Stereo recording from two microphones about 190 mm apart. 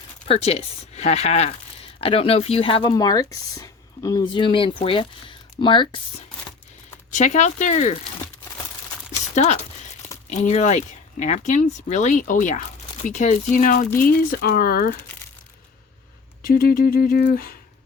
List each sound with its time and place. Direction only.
0.3 s speech: 35° left (ahead or behind)
7.1 s speech: 40° left (ahead or behind)
9.3 s speech: 40° left (ahead or behind)
16.4 s speech: 50° left (ahead or behind)